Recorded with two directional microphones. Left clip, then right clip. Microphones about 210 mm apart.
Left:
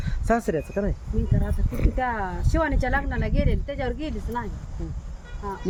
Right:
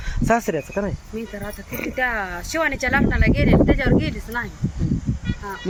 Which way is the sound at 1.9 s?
20° left (ahead or behind).